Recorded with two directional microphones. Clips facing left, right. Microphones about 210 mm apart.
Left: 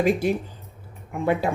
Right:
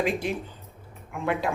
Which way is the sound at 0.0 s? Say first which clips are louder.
Left 6 dB; 45° left (ahead or behind).